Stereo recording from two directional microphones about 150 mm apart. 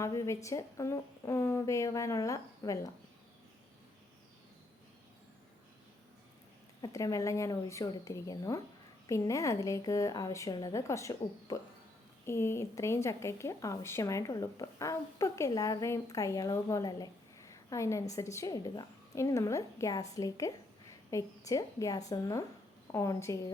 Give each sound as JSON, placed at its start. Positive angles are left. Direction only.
{"t": 0.0, "sound": "speech", "side_deg": 20}
{"t": 6.8, "sound": "speech", "side_deg": 20}